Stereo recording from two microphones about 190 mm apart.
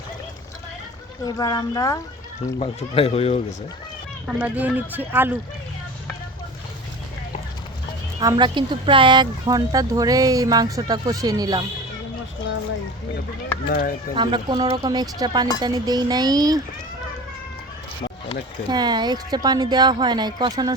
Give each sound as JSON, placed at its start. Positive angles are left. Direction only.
{"t": 1.2, "sound": "speech", "side_deg": 20}
{"t": 2.6, "sound": "speech", "side_deg": 30}
{"t": 4.4, "sound": "speech", "side_deg": -10}
{"t": 8.2, "sound": "speech", "side_deg": -20}
{"t": 13.7, "sound": "speech", "side_deg": 50}
{"t": 14.2, "sound": "speech", "side_deg": -25}
{"t": 18.7, "sound": "speech", "side_deg": -20}